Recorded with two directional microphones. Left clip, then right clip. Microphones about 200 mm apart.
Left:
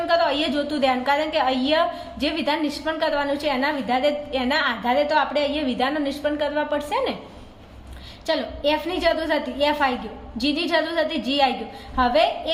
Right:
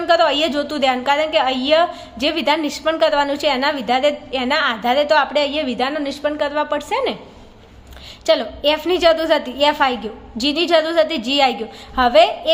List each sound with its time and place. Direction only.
0.1 s a woman's voice: 35° right (ahead or behind)
8.3 s a woman's voice: 35° right (ahead or behind)